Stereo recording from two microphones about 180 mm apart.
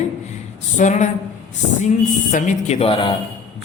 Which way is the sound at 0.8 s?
45° left (ahead or behind).